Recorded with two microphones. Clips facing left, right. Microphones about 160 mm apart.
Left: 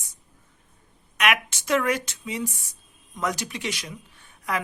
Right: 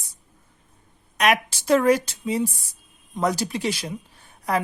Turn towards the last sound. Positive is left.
turn(degrees=-35)  # may be behind; listen again after turning